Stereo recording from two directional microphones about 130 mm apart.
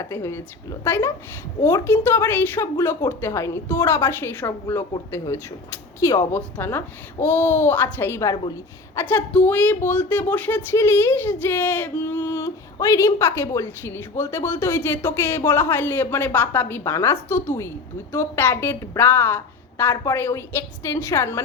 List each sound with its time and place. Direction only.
0.0 s a woman's voice: 20° left (ahead or behind)